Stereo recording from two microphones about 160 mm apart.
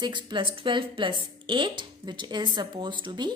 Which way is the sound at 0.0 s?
30° right (ahead or behind).